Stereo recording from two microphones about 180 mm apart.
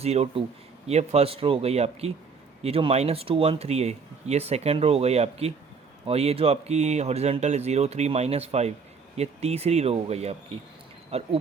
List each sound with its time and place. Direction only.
0.0 s speech: 35° right (ahead or behind)